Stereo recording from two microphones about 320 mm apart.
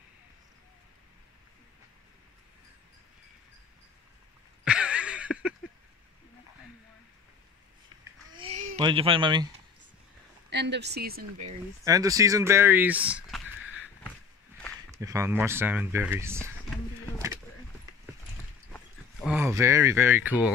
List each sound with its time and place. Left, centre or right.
4.6 s a sound: centre
7.9 s babbling: centre
8.4 s speech: centre
10.5 s speech: right
11.8 s speech: centre
14.9 s speech: centre
18.7 s a sound: centre